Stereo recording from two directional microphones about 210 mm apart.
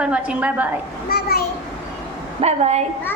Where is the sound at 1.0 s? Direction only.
45° left (ahead or behind).